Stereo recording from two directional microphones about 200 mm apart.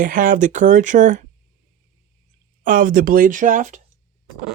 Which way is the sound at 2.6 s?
40° right (ahead or behind).